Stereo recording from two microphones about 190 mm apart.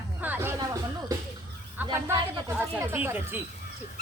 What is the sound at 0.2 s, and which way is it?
Music, 10° right (ahead or behind).